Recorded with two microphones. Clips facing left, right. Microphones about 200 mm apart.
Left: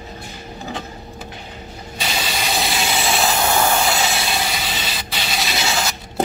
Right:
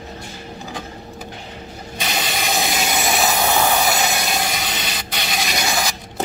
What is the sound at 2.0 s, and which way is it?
Steam, 50° right (ahead or behind).